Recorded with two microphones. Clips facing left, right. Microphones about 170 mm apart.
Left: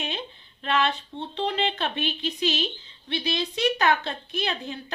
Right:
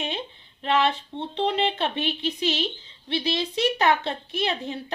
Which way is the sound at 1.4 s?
25° right (ahead or behind).